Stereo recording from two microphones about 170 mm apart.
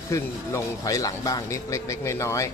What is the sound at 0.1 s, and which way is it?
Speech, 20° left (ahead or behind).